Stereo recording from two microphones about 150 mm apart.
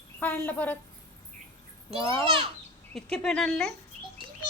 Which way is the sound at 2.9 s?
5° left (ahead or behind).